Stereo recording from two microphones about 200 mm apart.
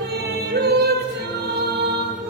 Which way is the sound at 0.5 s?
55° right (ahead or behind).